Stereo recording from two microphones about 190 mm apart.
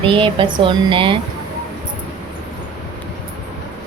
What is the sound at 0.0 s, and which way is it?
A woman's voice, 25° right (ahead or behind).